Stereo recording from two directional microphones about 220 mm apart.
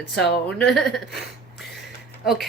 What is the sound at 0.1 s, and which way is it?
Speech, centre (ahead or behind).